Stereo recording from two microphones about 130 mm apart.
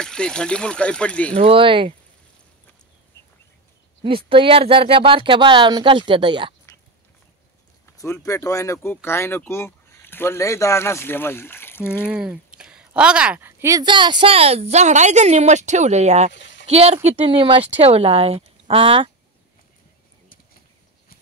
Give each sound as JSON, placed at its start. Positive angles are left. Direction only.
{"t": 0.0, "sound": "speech", "side_deg": 5}
{"t": 1.3, "sound": "a woman's voice", "side_deg": -45}
{"t": 4.0, "sound": "speech", "side_deg": -45}
{"t": 8.0, "sound": "speech", "side_deg": 25}
{"t": 12.1, "sound": "speech", "side_deg": -10}
{"t": 12.5, "sound": "a sound", "side_deg": -5}
{"t": 13.8, "sound": "a woman's voice", "side_deg": -35}